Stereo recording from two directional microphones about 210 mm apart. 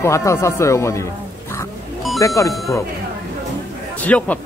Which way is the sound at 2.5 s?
Centre (ahead or behind).